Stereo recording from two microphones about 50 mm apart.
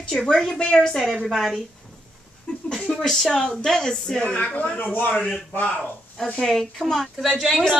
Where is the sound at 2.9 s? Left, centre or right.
Centre; by 4.7 s left.